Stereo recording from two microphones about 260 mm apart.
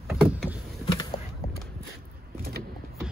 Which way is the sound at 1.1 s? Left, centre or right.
Centre.